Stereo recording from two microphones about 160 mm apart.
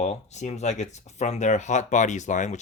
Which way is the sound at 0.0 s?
45° left (ahead or behind).